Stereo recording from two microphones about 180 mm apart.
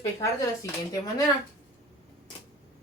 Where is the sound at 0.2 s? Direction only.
20° left (ahead or behind).